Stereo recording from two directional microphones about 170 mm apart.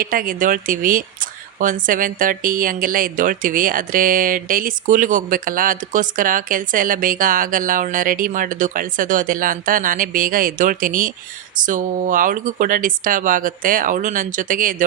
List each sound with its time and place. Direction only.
0.0 s speech: 55° right (ahead or behind)